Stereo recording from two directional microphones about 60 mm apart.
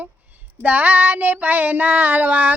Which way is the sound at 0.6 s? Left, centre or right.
Right.